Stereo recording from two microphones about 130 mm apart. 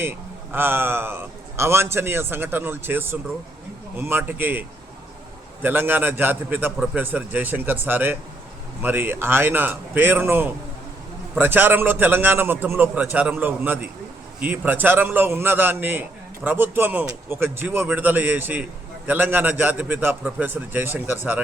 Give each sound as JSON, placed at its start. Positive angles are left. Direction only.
{"t": 0.0, "sound": "a man's voice", "side_deg": -15}
{"t": 5.6, "sound": "a man's voice", "side_deg": -15}